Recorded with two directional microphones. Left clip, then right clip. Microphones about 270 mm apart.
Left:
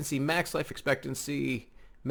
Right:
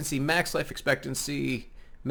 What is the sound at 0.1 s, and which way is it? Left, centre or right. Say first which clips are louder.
Speech: right 3 dB; left.